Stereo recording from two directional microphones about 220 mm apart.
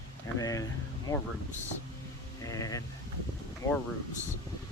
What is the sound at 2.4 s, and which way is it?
Speech, 15° left (ahead or behind).